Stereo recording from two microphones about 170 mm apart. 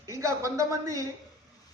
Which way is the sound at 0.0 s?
20° right (ahead or behind).